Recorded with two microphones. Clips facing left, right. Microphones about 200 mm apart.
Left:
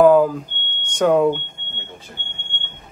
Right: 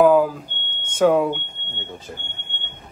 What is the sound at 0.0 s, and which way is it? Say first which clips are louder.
Smoke detector: left 2 dB; 5° right (ahead or behind).